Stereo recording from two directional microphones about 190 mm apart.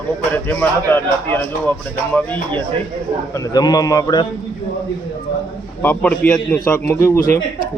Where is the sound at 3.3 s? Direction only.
20° left (ahead or behind).